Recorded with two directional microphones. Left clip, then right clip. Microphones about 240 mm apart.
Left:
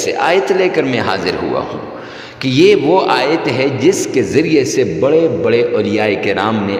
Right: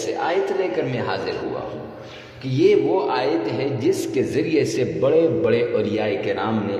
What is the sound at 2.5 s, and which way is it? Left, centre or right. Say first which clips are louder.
A man's voice: left 7 dB; left.